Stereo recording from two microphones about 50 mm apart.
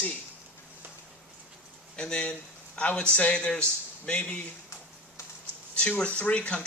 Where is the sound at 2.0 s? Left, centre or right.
Left.